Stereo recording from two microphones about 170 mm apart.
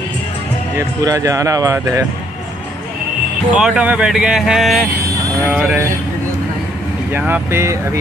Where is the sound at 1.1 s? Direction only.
20° right (ahead or behind).